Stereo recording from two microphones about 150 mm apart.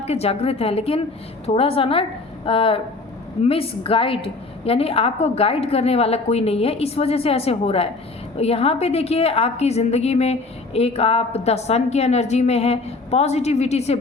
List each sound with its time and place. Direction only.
0.0 s a woman's voice: 45° left (ahead or behind)